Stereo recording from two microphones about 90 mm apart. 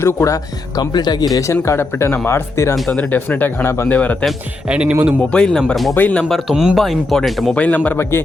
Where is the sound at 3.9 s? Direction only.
15° left (ahead or behind).